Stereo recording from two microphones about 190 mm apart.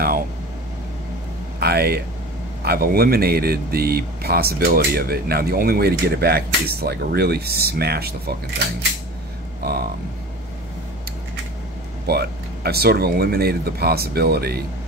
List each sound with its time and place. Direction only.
1.6 s speech: 55° right (ahead or behind)
9.6 s a sound: 55° right (ahead or behind)
12.1 s speech: 55° right (ahead or behind)